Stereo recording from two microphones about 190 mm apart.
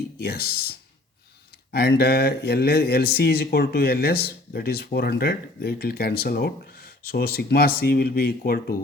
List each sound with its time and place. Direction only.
0.2 s speech: 55° left (ahead or behind)